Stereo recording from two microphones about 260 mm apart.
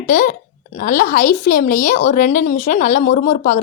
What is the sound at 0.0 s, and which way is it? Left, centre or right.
A woman's voice, left.